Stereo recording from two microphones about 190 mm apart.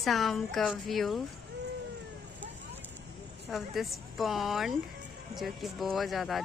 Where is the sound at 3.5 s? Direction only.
Centre (ahead or behind).